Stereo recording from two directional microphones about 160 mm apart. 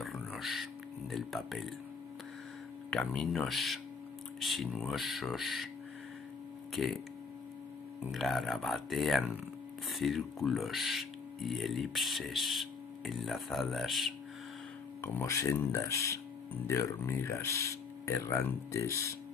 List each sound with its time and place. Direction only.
0.0 s a sound: centre (ahead or behind)
1.1 s speech: centre (ahead or behind)
2.9 s speech: 5° left (ahead or behind)
6.7 s speech: centre (ahead or behind)
8.0 s speech: centre (ahead or behind)
15.0 s speech: 15° left (ahead or behind)